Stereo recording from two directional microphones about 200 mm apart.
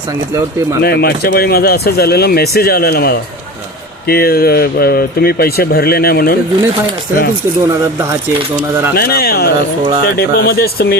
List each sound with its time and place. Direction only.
0.8 s speech: 50° left (ahead or behind)
9.0 s speech: 50° left (ahead or behind)